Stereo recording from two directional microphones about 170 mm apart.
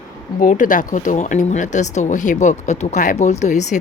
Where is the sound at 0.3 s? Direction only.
50° left (ahead or behind).